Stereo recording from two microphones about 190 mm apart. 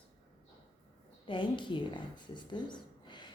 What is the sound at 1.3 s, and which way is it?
Speech, 25° left (ahead or behind).